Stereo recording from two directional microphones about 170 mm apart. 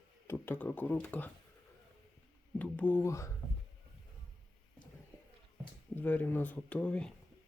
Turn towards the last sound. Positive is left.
turn(degrees=5)  # may be behind; listen again after turning